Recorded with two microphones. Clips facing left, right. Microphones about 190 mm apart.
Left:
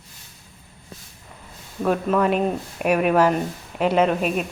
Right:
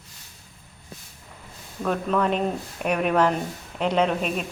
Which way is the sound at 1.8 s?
10° left (ahead or behind).